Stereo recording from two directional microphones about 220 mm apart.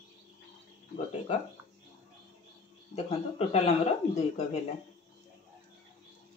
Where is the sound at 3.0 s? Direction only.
30° left (ahead or behind).